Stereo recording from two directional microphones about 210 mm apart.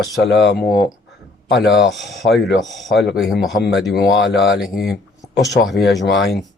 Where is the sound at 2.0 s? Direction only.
Centre (ahead or behind).